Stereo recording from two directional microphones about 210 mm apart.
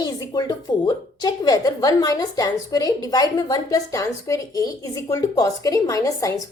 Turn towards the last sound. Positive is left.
turn(degrees=15)  # may be behind; listen again after turning